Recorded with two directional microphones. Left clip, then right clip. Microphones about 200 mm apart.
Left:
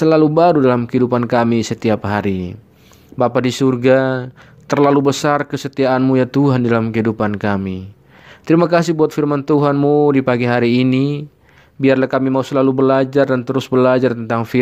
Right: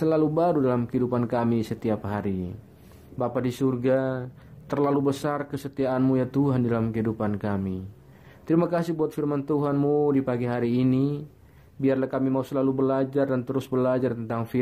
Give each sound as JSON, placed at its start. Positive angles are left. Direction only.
{"t": 0.0, "sound": "speech", "side_deg": 40}